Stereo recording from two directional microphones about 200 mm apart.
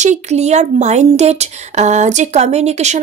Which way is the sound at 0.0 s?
35° right (ahead or behind).